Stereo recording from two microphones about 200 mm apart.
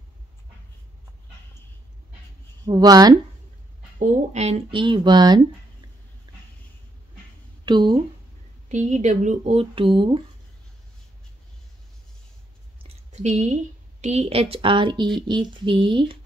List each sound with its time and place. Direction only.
2.6 s speech: 20° right (ahead or behind)
4.0 s speech: 35° right (ahead or behind); by 5.4 s 20° right (ahead or behind)
7.6 s speech: 20° right (ahead or behind)
8.6 s speech: 35° right (ahead or behind)
12.8 s a sound: 35° right (ahead or behind)
14.0 s speech: 30° right (ahead or behind)